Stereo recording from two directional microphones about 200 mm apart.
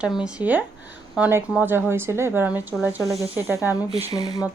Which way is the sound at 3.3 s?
15° right (ahead or behind).